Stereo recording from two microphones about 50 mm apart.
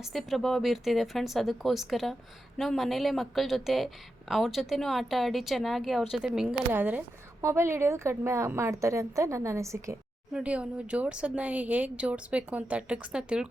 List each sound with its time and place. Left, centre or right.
0.0 s speech: centre
6.7 s speech: right
7.4 s a woman's voice: right
10.4 s speech: right